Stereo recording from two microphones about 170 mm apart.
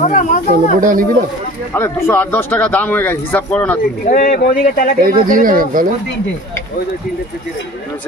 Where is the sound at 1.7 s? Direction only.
15° left (ahead or behind).